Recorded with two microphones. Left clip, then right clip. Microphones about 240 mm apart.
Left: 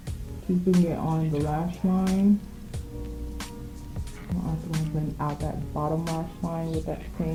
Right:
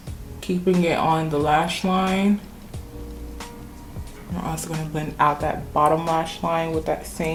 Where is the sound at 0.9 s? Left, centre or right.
Centre.